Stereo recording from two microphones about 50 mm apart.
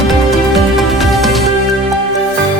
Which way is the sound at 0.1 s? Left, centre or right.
Centre.